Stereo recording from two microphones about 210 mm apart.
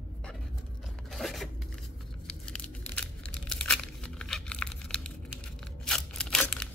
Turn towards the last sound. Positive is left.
turn(degrees=5)  # may be behind; listen again after turning